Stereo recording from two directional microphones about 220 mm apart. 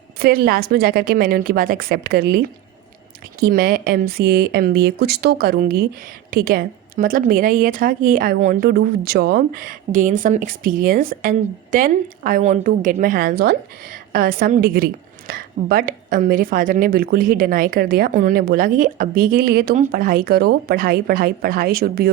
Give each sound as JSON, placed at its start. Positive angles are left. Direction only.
{"t": 0.2, "sound": "a woman's voice", "side_deg": -45}